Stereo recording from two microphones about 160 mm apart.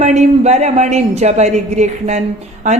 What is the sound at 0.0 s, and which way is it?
Speech, 45° right (ahead or behind).